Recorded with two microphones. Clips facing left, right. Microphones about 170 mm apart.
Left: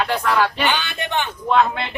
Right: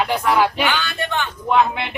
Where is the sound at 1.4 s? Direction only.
15° right (ahead or behind).